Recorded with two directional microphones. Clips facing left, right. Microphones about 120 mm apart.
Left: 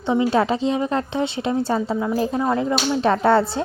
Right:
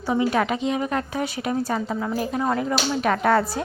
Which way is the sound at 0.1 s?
25° left (ahead or behind).